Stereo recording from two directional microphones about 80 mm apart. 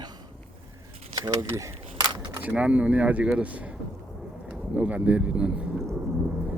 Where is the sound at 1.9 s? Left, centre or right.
Right.